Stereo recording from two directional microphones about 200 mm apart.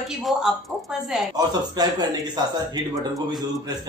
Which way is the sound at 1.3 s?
20° right (ahead or behind).